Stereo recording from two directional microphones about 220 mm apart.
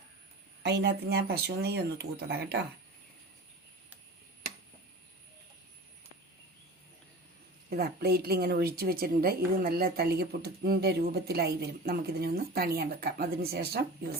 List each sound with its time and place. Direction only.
0.6 s speech: 50° right (ahead or behind)
7.7 s speech: 45° right (ahead or behind)